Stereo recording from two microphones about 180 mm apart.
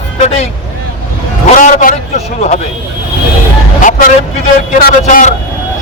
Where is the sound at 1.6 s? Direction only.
45° left (ahead or behind).